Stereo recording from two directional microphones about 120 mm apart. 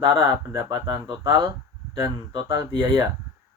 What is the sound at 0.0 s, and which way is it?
Speech, 30° right (ahead or behind).